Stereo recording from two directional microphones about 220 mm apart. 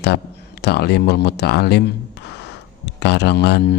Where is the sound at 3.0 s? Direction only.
50° left (ahead or behind).